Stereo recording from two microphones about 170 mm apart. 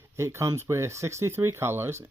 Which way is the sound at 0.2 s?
15° right (ahead or behind).